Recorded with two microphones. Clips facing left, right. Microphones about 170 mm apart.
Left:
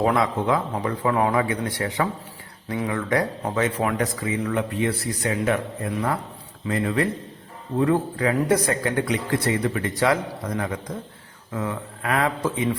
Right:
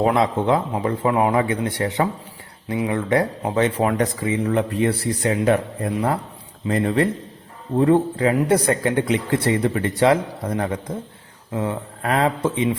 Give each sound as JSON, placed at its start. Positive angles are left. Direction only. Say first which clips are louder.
{"t": 0.0, "sound": "a man's voice", "louder": "right 3 dB", "side_deg": -25}